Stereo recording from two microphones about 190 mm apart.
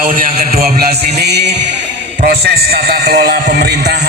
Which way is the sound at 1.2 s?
60° right (ahead or behind).